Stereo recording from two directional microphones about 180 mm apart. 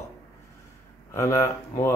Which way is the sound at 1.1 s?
15° left (ahead or behind).